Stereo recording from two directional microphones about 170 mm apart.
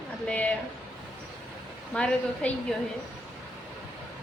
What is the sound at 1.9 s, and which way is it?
Speech, 5° left (ahead or behind).